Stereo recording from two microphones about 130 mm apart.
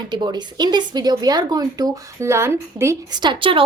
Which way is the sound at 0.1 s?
35° right (ahead or behind).